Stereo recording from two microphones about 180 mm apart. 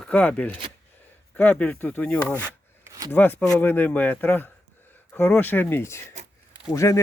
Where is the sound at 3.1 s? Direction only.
10° left (ahead or behind).